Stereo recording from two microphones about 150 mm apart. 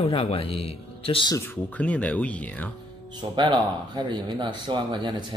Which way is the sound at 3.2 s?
30° right (ahead or behind).